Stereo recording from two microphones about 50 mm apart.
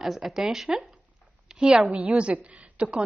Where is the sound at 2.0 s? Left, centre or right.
Right.